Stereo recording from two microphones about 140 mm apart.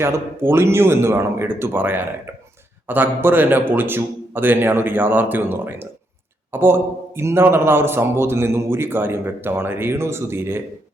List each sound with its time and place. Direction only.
0.0 s a man's voice: 15° right (ahead or behind)